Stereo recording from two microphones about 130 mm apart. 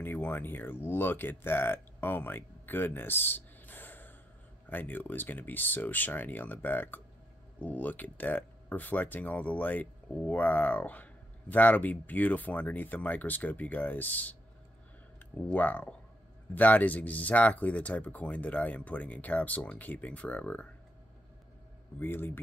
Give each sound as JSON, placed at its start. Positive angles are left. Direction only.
{"t": 0.0, "sound": "speech", "side_deg": 15}
{"t": 15.3, "sound": "speech", "side_deg": 10}
{"t": 22.0, "sound": "speech", "side_deg": 15}